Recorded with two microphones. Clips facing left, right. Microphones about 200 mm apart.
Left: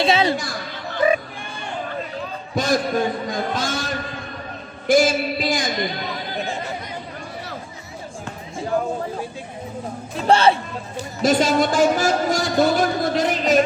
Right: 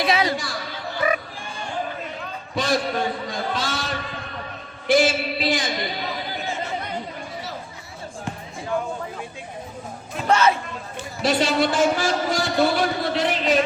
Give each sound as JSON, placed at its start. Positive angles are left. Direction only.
{"t": 0.0, "sound": "chatter", "side_deg": 25}
{"t": 1.0, "sound": "a sound", "side_deg": 30}
{"t": 2.6, "sound": "speech", "side_deg": 45}
{"t": 10.2, "sound": "speech", "side_deg": 30}
{"t": 11.2, "sound": "speech", "side_deg": 45}